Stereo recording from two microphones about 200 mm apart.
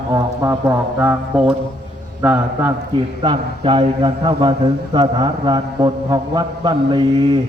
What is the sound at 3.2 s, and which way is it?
Speech, 25° right (ahead or behind).